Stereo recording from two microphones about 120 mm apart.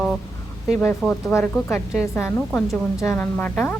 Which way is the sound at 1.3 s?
20° left (ahead or behind).